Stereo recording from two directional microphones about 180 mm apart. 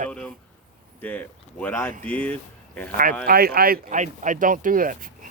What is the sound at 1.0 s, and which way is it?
Speech, 10° left (ahead or behind).